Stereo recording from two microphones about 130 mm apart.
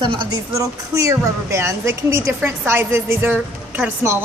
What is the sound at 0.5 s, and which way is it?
A woman's voice, 25° right (ahead or behind).